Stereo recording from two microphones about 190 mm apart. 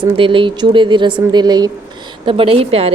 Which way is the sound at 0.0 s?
25° right (ahead or behind).